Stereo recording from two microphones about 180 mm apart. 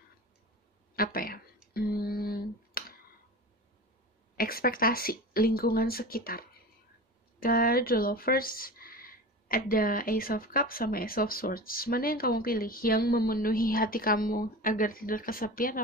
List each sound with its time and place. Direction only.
0.9 s speech: 55° left (ahead or behind)
1.7 s a sound: 60° left (ahead or behind)
4.4 s a woman's voice: 55° left (ahead or behind)